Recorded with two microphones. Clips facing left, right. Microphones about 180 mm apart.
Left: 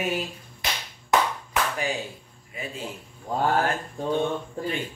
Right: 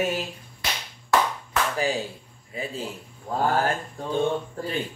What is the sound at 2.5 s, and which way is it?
Speech, 30° right (ahead or behind).